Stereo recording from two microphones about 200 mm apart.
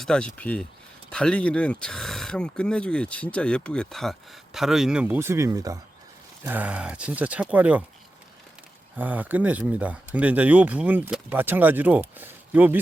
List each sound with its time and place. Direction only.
0.0 s speech: 5° left (ahead or behind)
9.0 s speech: 10° right (ahead or behind)